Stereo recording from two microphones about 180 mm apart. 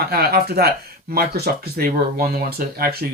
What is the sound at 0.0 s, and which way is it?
Speech, 60° right (ahead or behind).